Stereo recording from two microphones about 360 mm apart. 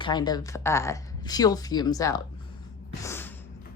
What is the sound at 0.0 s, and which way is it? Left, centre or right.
Speech, centre.